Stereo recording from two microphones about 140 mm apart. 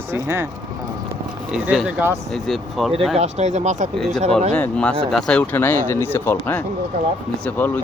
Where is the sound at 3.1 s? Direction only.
55° right (ahead or behind).